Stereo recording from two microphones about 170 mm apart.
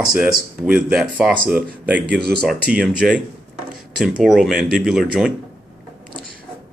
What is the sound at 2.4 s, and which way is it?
Speech, 5° right (ahead or behind).